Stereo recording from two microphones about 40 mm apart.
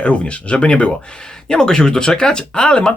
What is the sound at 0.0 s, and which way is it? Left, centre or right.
Speech, left.